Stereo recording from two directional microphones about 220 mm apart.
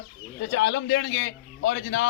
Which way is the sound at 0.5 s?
55° left (ahead or behind).